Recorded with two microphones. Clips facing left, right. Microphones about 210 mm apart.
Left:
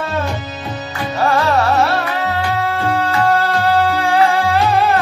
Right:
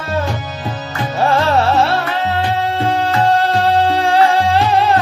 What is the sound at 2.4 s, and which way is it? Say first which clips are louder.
Music: right 1 dB; 25° right (ahead or behind).